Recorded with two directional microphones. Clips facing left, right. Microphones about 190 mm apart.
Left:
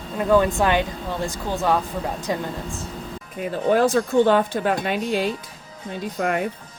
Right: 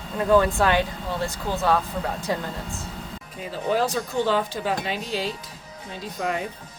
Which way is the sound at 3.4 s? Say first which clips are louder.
Left 5 dB; 50° left (ahead or behind).